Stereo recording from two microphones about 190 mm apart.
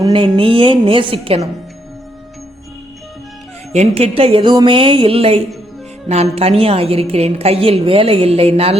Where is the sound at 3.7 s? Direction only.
35° right (ahead or behind).